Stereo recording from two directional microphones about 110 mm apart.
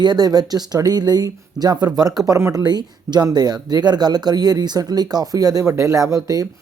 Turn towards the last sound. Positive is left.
turn(degrees=-30)  # may be behind; listen again after turning